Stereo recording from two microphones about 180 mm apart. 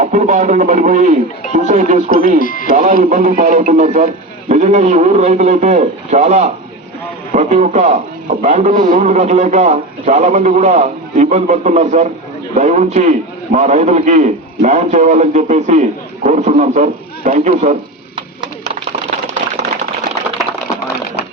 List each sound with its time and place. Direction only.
0.0 s a man's voice: 45° right (ahead or behind)
2.4 s speech: 50° left (ahead or behind)
2.6 s a man's voice: 45° right (ahead or behind)